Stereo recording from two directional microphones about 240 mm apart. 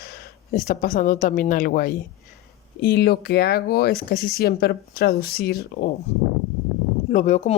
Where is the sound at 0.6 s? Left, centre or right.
Left.